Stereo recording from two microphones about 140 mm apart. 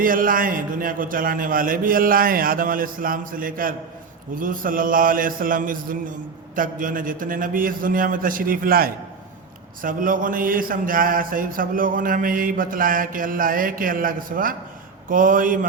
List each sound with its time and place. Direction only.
0.0 s speech: 80° right
9.8 s speech: 75° right (ahead or behind)
15.1 s speech: 75° right (ahead or behind)